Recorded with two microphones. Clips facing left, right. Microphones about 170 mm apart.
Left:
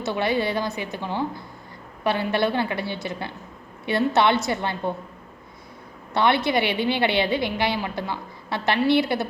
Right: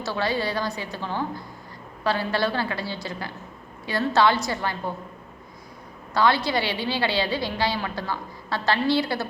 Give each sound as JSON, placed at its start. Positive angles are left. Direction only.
{"t": 0.0, "sound": "a woman's voice", "side_deg": 20}
{"t": 6.1, "sound": "a woman's voice", "side_deg": 25}